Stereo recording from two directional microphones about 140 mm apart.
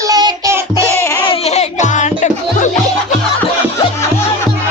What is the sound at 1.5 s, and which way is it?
Music, 55° left (ahead or behind).